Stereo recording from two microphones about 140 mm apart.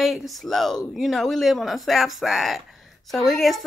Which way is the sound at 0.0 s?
Centre (ahead or behind).